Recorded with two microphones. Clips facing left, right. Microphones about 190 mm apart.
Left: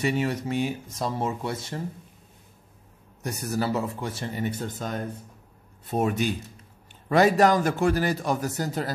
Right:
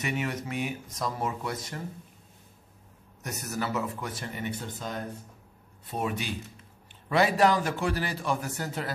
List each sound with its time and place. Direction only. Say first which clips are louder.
0.0 s speech: left 6 dB; 30° left (ahead or behind)
3.2 s a man's voice: left 5 dB; 30° left (ahead or behind)